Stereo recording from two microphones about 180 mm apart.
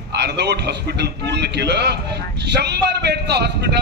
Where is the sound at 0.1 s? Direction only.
70° right (ahead or behind).